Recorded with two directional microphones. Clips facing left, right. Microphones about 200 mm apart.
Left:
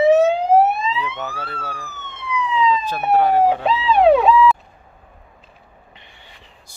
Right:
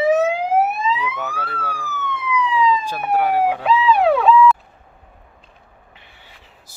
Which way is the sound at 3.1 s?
10° right (ahead or behind).